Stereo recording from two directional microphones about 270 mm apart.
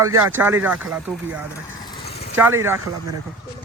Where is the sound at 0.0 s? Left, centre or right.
Centre.